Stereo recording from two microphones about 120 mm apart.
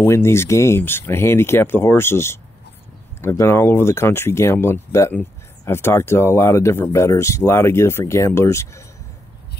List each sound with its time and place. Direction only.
0.0 s speech: 20° left (ahead or behind)